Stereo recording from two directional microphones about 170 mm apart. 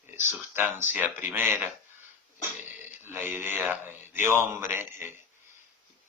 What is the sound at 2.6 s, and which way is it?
Speech, 10° right (ahead or behind).